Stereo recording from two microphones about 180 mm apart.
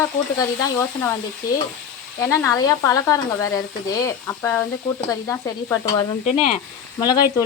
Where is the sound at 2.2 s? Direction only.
15° left (ahead or behind).